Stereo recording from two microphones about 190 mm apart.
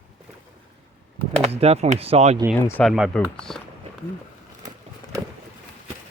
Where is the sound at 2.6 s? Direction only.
15° left (ahead or behind).